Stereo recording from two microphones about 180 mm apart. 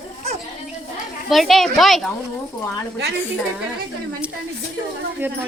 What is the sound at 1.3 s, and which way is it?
Speech, centre (ahead or behind).